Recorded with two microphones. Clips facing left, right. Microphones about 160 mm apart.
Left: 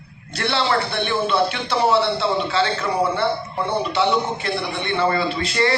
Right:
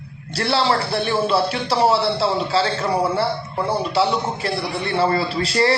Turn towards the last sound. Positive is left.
turn(degrees=-35)  # may be behind; listen again after turning